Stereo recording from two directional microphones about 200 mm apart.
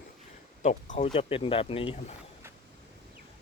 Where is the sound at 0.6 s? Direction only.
35° left (ahead or behind).